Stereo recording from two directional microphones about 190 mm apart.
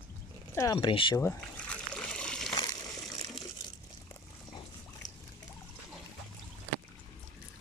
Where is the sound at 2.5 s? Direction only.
20° left (ahead or behind).